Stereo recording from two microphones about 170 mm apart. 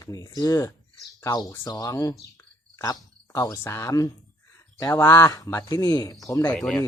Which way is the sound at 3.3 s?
20° left (ahead or behind).